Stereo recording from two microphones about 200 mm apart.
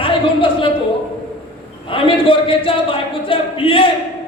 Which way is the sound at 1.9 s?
25° left (ahead or behind).